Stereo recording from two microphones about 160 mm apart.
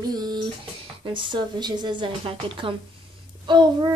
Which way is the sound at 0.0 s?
25° right (ahead or behind).